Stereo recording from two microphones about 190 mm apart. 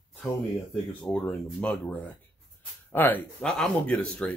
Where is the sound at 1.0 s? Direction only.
5° left (ahead or behind).